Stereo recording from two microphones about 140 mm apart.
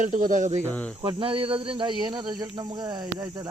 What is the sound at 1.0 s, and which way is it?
Speech, 35° right (ahead or behind).